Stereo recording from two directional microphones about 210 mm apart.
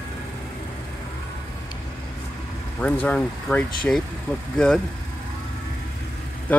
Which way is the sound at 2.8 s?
5° left (ahead or behind).